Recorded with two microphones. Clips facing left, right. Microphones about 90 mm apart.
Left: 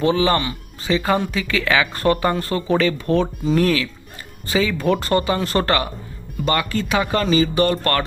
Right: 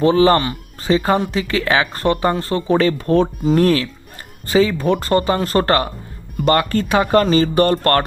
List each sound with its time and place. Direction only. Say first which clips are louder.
0.0 s speech: right 5 dB; 35° right (ahead or behind)